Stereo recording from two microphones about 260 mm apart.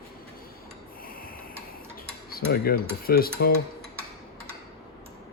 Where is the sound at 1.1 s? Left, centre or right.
Left.